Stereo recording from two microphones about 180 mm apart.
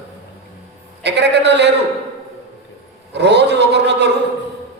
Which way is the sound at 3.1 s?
70° right (ahead or behind).